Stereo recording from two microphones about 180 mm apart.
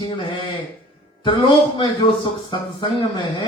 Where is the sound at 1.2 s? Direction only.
25° left (ahead or behind).